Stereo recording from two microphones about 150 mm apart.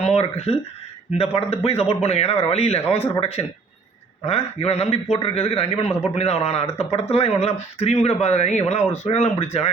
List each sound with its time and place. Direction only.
0.0 s a man's voice: 45° left (ahead or behind)